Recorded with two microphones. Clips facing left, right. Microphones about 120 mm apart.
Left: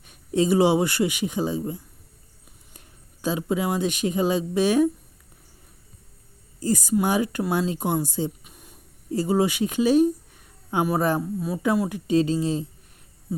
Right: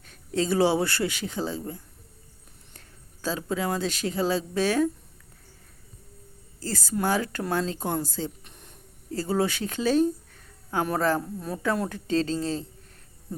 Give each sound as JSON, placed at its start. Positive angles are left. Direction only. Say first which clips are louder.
{"t": 0.0, "sound": "speech", "louder": "left 5 dB", "side_deg": 15}
{"t": 6.6, "sound": "speech", "louder": "left 6 dB", "side_deg": 15}